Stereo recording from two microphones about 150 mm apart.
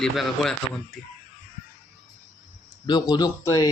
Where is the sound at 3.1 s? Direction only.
25° left (ahead or behind).